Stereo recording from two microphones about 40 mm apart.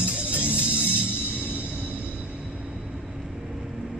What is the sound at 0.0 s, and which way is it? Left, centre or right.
Music, right.